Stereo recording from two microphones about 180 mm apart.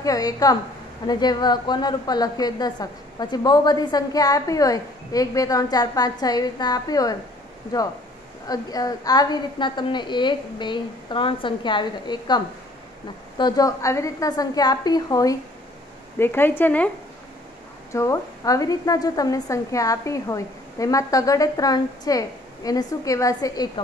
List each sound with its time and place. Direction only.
0.0 s a woman's voice: 20° left (ahead or behind)
8.5 s a woman's voice: 20° left (ahead or behind)
17.9 s a woman's voice: 15° left (ahead or behind)